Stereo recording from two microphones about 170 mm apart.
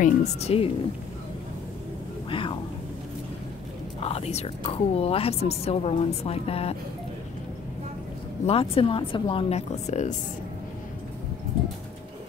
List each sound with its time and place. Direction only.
0.0 s a woman's voice: 40° left (ahead or behind)
2.2 s speech: 30° left (ahead or behind)
4.0 s a woman's voice: 35° left (ahead or behind)
8.5 s a woman's voice: 35° left (ahead or behind)